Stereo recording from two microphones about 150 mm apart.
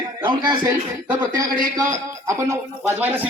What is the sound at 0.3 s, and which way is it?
Speech, 30° right (ahead or behind).